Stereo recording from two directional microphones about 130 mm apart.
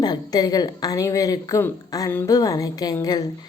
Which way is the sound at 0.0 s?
30° left (ahead or behind).